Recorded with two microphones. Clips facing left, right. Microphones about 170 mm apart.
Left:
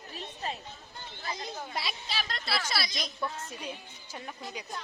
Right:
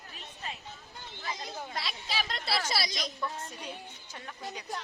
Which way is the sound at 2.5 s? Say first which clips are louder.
Right 1 dB; 35° right (ahead or behind).